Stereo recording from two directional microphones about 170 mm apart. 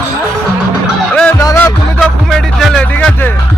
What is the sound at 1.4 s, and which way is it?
Music, 15° left (ahead or behind).